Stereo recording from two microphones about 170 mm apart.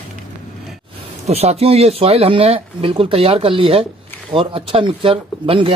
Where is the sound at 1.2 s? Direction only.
40° right (ahead or behind).